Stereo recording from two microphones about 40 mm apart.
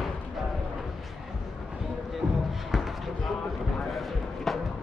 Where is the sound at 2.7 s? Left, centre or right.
Centre.